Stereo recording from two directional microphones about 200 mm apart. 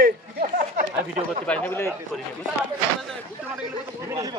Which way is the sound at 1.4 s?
10° left (ahead or behind).